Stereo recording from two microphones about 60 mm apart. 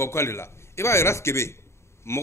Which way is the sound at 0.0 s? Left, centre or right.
Left.